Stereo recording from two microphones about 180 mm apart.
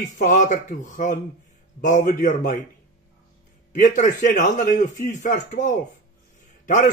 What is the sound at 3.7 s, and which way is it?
A man's voice, 45° left (ahead or behind).